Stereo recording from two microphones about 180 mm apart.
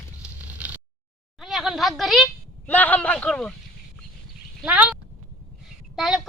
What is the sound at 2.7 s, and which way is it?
Speech, 10° left (ahead or behind).